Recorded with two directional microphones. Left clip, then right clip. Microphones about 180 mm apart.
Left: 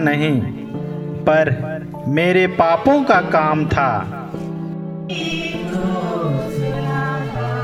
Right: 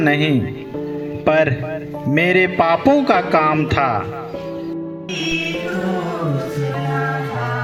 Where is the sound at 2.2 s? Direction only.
40° right (ahead or behind).